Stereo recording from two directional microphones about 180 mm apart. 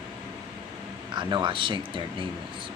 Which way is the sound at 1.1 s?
25° right (ahead or behind).